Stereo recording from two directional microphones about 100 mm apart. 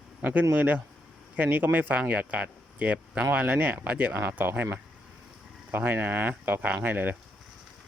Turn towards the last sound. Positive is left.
turn(degrees=-20)  # may be behind; listen again after turning